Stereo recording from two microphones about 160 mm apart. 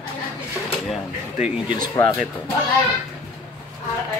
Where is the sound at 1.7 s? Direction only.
30° left (ahead or behind).